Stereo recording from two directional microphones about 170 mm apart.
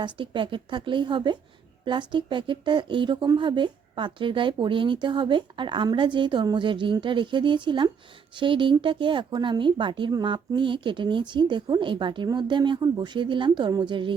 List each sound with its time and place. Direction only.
0.0 s a woman's voice: 30° right (ahead or behind)